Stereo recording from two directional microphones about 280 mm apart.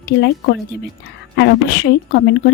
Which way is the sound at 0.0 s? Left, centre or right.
Left.